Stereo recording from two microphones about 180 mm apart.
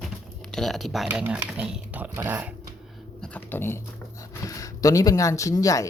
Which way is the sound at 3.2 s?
10° left (ahead or behind).